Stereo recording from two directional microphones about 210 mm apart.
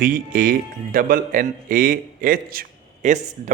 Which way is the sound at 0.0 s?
40° right (ahead or behind).